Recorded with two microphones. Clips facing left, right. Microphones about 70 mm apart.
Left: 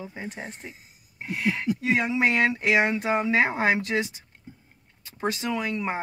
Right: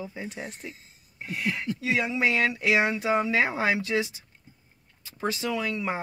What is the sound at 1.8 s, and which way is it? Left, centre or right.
Speech, left.